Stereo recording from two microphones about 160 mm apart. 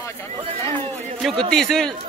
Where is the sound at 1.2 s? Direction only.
Centre (ahead or behind).